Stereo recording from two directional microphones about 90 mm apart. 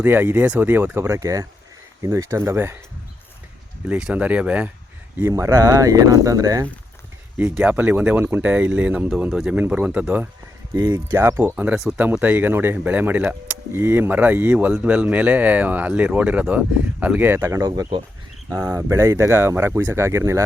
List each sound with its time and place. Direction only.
0.0 s speech: 20° right (ahead or behind)
3.8 s speech: 15° right (ahead or behind)
5.3 s speech: 35° right (ahead or behind)
7.3 s speech: 20° right (ahead or behind)
10.9 s speech: 30° right (ahead or behind)
17.7 s speech: 45° right (ahead or behind)
18.4 s speech: 35° right (ahead or behind)